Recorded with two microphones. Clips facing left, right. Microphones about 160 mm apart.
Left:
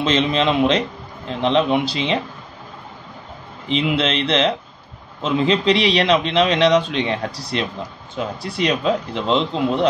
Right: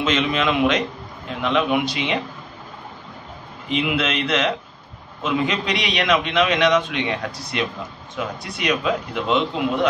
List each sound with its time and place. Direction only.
0.0 s a man's voice: 30° left (ahead or behind)
3.6 s a man's voice: 25° left (ahead or behind)